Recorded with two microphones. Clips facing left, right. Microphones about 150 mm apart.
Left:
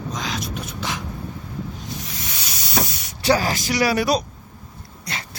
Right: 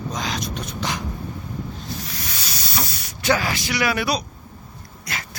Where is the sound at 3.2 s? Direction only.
35° left (ahead or behind).